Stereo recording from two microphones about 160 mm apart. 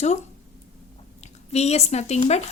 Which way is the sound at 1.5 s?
40° left (ahead or behind).